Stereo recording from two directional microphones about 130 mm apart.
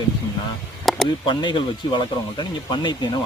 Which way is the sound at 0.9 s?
Centre (ahead or behind).